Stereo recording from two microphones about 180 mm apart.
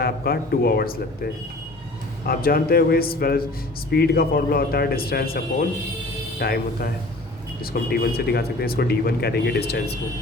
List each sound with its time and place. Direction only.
0.0 s speech: 55° left (ahead or behind)